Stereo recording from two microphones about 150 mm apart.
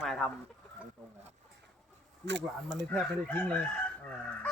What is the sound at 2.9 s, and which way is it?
Chicken, 10° left (ahead or behind).